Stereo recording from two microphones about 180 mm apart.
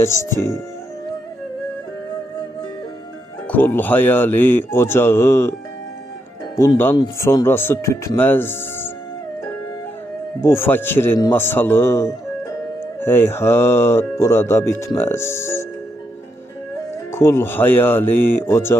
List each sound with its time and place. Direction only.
0.0 s speech: 15° left (ahead or behind)
3.4 s speech: 10° left (ahead or behind)
6.6 s speech: 15° left (ahead or behind)
10.4 s speech: 15° left (ahead or behind)
16.9 s speech: 15° left (ahead or behind)